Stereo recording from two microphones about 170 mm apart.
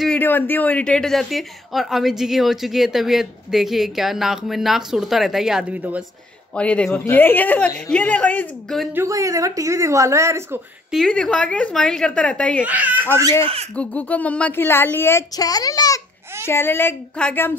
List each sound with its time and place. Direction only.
0.0 s a woman's voice: 10° left (ahead or behind); by 6.0 s 10° right (ahead or behind)
6.5 s speech: 5° left (ahead or behind)
8.9 s speech: 20° right (ahead or behind)
10.9 s speech: 5° left (ahead or behind)
12.6 s speech: 10° right (ahead or behind)
13.7 s speech: 10° left (ahead or behind)